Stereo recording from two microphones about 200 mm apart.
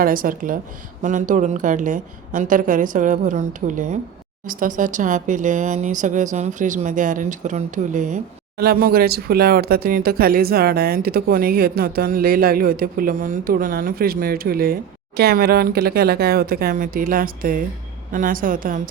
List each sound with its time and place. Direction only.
0.0 s a woman's voice: 45° right (ahead or behind)